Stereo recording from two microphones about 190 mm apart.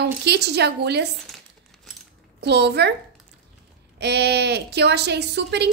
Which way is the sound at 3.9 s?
60° right (ahead or behind).